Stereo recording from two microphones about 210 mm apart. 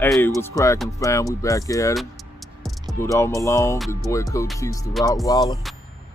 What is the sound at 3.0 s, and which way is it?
Speech, 15° left (ahead or behind).